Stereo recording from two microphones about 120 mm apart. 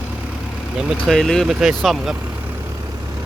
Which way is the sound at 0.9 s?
Centre (ahead or behind).